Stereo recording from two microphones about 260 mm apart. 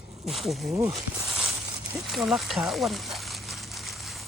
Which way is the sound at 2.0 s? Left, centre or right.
Centre.